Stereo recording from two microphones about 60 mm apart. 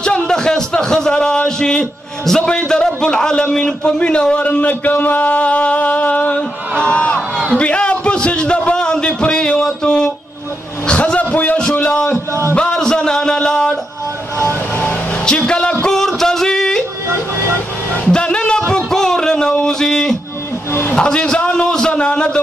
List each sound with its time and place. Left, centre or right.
0.0 s a man's voice: centre
6.8 s crowd: centre
7.5 s a sound: centre
12.5 s music: centre
15.2 s music: centre
17.9 s music: centre
20.9 s a man's voice: centre